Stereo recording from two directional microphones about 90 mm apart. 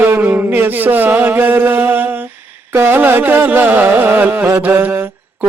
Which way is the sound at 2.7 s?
20° right (ahead or behind).